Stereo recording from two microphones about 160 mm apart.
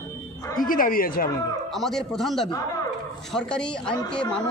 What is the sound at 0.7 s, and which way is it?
Speech, 60° left (ahead or behind).